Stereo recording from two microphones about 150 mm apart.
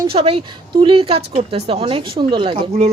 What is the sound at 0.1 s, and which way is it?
Speech, 40° right (ahead or behind).